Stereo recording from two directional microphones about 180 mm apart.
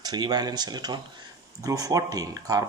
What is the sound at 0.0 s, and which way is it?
Speech, 20° right (ahead or behind).